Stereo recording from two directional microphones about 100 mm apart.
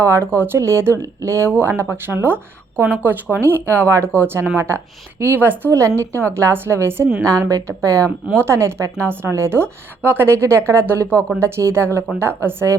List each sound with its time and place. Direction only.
0.0 s a woman's voice: 25° right (ahead or behind)